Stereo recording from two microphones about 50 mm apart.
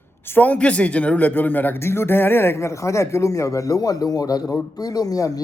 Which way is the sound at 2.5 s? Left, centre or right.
Left.